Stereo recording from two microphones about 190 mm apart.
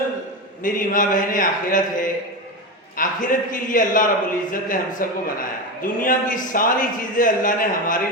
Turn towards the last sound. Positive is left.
turn(degrees=45)  # may be behind; listen again after turning